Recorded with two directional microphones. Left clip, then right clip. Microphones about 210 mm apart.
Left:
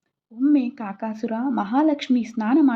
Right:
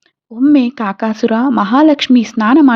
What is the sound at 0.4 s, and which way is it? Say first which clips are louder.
Speech: right 10 dB; 40° right (ahead or behind).